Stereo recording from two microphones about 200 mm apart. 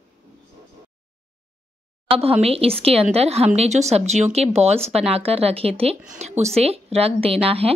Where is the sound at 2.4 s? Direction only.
30° right (ahead or behind).